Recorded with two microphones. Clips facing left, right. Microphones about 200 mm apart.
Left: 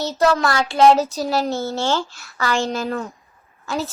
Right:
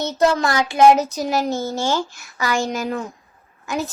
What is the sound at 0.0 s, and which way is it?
Speech, 20° right (ahead or behind).